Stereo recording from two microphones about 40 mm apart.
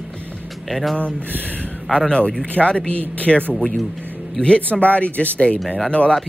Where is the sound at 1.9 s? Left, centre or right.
Centre.